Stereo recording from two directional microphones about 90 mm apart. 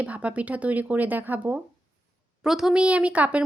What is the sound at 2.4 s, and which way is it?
Speech, 5° right (ahead or behind).